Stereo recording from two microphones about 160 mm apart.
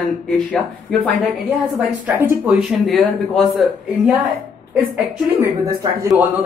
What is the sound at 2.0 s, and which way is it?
Speech, 15° right (ahead or behind).